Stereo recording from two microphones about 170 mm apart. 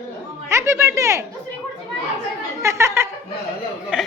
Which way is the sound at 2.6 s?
15° right (ahead or behind).